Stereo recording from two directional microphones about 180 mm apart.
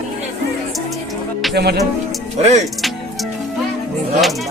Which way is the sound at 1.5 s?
65° right (ahead or behind).